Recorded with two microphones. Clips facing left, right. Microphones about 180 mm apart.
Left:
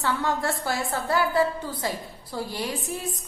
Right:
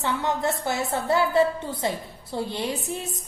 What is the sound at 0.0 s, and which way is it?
A woman's voice, 20° right (ahead or behind).